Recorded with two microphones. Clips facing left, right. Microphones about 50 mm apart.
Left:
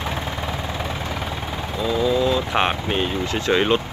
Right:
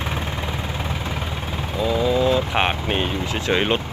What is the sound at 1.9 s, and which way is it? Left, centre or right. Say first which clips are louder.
Speech: even; centre.